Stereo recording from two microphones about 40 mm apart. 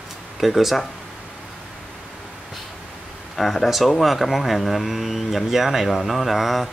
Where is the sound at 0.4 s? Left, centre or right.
Centre.